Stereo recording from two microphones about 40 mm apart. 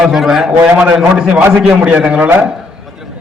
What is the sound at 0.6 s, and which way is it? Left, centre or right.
Speech, right.